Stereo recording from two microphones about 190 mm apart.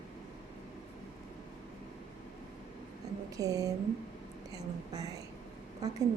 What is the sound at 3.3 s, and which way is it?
A woman's voice, 20° right (ahead or behind).